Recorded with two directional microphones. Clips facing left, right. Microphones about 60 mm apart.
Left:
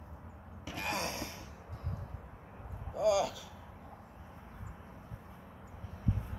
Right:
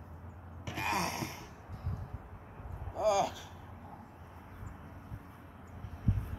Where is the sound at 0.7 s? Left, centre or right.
Right.